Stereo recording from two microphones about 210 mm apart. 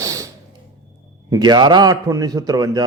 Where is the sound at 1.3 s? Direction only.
20° right (ahead or behind).